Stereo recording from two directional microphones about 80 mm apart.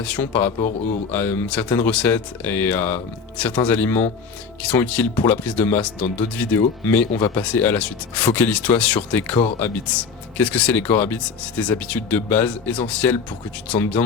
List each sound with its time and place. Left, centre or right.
0.0 s speech: centre